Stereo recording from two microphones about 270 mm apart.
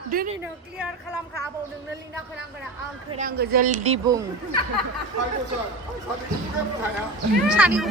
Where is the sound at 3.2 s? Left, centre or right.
Right.